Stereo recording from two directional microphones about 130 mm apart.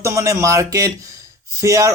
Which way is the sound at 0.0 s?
25° right (ahead or behind).